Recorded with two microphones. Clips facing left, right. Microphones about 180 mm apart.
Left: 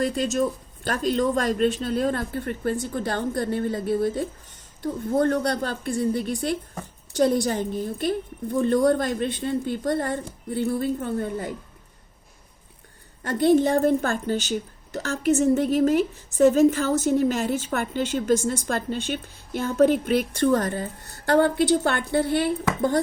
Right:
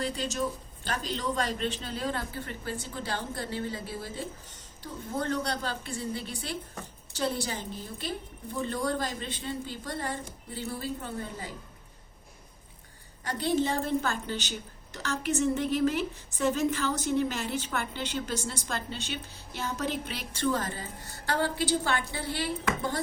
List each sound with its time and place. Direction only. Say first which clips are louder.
0.0 s a woman's voice: left 8 dB; 55° left (ahead or behind)
13.2 s a woman's voice: left 9 dB; 55° left (ahead or behind)